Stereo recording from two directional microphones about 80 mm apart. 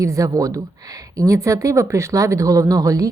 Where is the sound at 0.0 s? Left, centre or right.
Right.